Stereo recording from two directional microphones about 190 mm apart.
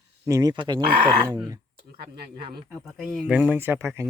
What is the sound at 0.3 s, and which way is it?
Speech, 20° right (ahead or behind).